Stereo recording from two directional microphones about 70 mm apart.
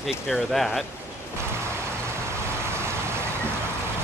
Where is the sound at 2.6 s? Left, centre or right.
Right.